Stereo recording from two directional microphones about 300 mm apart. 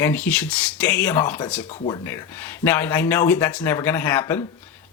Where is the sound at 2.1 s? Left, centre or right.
Centre.